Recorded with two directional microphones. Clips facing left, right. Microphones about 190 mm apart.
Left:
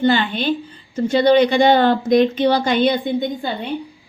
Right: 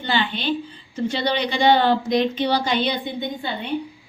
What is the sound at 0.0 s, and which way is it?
A woman's voice, 50° left (ahead or behind).